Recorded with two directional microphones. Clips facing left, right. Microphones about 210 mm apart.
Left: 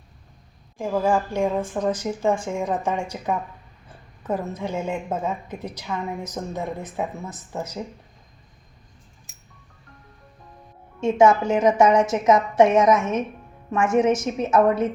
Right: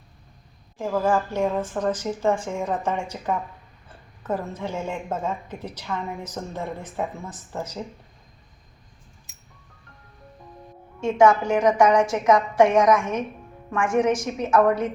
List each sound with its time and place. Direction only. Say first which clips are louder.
0.8 s a woman's voice: left 1 dB; 10° left (ahead or behind)
11.0 s a woman's voice: left 1 dB; 25° left (ahead or behind)